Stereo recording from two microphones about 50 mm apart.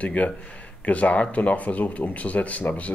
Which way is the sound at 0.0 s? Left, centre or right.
Left.